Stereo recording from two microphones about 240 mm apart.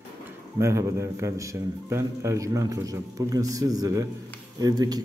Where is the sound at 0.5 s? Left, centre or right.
Centre.